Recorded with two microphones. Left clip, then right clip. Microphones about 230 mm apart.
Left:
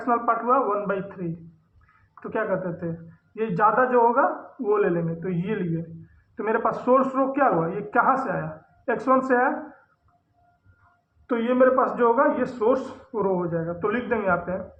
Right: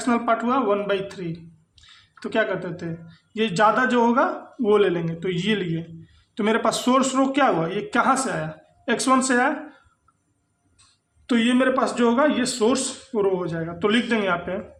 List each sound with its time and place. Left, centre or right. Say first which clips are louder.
0.0 s a man's voice: right 1 dB; right
3.3 s a man's voice: right 1 dB; right
11.3 s a man's voice: left 1 dB; right